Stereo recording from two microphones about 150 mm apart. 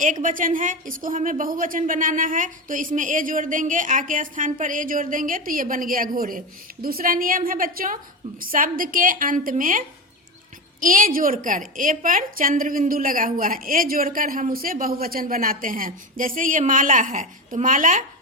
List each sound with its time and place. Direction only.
0.0 s a woman's voice: 60° right (ahead or behind)